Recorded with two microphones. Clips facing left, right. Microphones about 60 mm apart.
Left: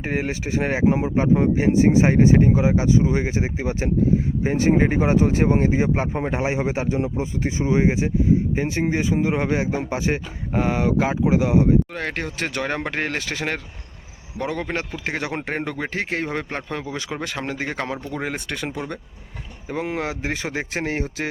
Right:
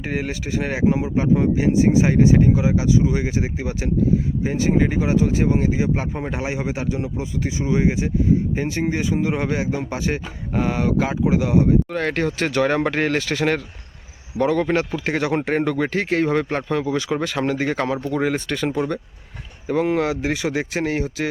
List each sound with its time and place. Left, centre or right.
0.0 s speech: left
4.4 s speech: left
11.9 s speech: centre
13.1 s speech: left
17.9 s speech: centre
18.3 s speech: centre